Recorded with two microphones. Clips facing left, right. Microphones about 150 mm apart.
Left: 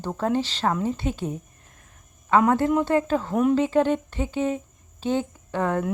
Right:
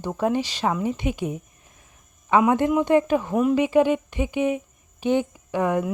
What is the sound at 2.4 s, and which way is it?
A woman's voice, 15° right (ahead or behind).